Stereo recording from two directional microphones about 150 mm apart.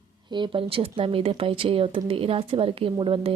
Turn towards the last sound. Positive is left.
turn(degrees=-35)  # may be behind; listen again after turning